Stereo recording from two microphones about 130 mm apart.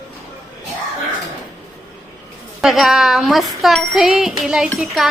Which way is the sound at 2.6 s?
Centre (ahead or behind).